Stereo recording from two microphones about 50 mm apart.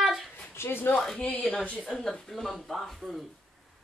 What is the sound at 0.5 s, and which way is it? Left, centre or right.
Speech, left.